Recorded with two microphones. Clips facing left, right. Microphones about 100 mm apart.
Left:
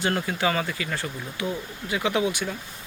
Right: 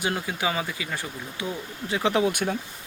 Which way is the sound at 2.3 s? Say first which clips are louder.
Right 3 dB; 50° right (ahead or behind).